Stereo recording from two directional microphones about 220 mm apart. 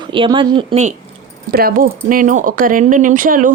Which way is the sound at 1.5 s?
45° right (ahead or behind).